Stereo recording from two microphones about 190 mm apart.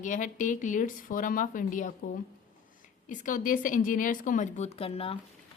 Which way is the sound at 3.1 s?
45° left (ahead or behind).